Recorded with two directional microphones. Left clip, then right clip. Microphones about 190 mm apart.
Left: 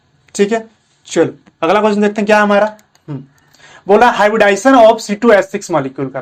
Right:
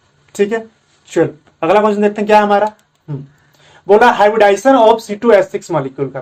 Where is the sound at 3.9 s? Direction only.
25° left (ahead or behind).